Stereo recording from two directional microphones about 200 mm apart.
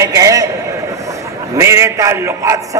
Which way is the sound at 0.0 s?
15° right (ahead or behind).